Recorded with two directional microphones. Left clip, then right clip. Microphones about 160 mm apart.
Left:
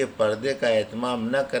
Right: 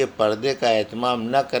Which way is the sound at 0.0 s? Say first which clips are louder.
Right 3 dB; 35° right (ahead or behind).